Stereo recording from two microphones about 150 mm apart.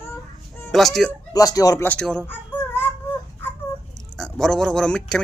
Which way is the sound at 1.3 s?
25° left (ahead or behind).